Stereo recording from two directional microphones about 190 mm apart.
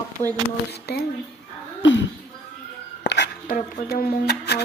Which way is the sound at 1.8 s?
75° left (ahead or behind).